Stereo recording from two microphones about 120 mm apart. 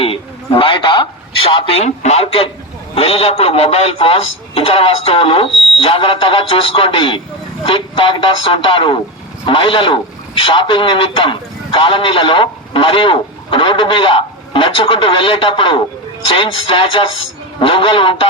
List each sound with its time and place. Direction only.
0.0 s a man's voice: 50° left (ahead or behind)